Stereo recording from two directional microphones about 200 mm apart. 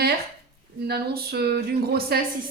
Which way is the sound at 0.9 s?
50° right (ahead or behind).